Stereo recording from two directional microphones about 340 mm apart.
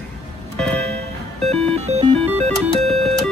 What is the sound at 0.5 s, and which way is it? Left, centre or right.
Music, centre.